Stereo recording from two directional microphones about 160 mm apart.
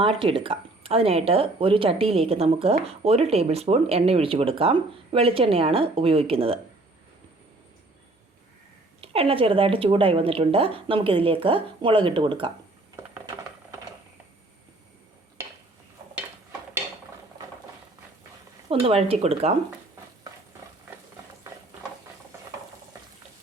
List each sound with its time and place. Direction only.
0.0 s speech: 35° right (ahead or behind)
9.0 s speech: 35° right (ahead or behind)
18.7 s speech: 35° right (ahead or behind)